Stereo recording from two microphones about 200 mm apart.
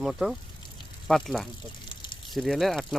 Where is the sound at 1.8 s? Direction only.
25° left (ahead or behind).